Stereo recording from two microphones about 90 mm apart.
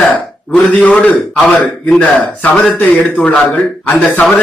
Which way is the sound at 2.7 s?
10° left (ahead or behind).